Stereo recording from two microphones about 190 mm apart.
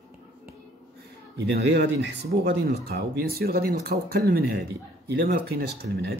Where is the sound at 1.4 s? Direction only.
65° right (ahead or behind).